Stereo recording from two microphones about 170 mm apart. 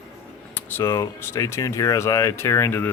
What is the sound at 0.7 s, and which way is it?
Speech, 15° left (ahead or behind).